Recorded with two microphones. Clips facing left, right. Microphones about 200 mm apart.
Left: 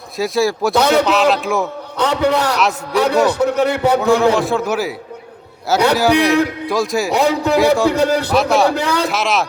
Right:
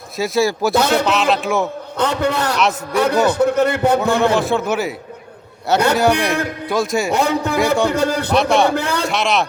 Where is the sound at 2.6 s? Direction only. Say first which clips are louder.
Even; centre (ahead or behind).